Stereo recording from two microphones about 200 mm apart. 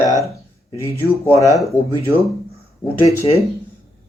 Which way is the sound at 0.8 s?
10° left (ahead or behind).